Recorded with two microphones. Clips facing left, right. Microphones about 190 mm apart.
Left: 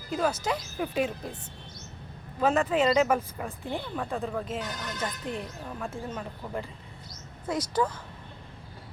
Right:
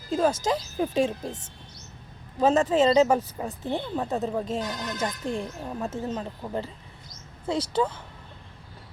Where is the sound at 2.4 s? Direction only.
25° right (ahead or behind).